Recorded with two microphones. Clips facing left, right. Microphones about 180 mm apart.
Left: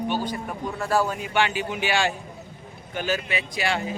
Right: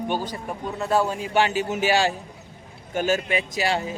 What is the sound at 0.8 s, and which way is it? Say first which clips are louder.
Speech: right 2 dB; 25° right (ahead or behind).